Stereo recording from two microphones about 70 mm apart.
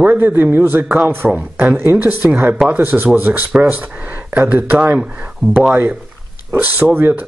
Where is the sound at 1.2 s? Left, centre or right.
Centre.